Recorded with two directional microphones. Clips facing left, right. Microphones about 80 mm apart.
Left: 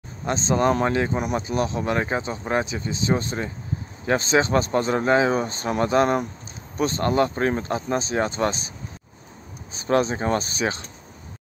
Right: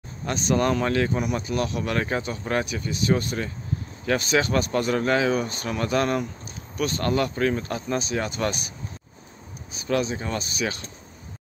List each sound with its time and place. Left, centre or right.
0.2 s speech: left